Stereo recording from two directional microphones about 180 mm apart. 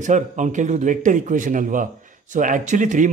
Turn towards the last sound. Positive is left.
turn(degrees=-45)  # may be behind; listen again after turning